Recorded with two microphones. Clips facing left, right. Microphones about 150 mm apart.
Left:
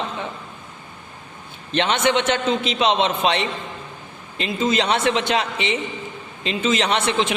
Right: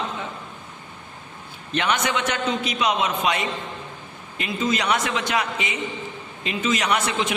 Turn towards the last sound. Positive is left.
turn(degrees=25)  # may be behind; listen again after turning